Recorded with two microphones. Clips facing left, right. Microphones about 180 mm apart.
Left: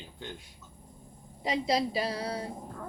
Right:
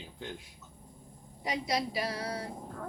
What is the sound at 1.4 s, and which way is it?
A woman's voice, 25° left (ahead or behind).